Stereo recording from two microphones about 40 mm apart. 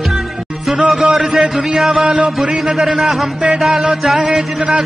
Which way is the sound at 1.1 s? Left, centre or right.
Centre.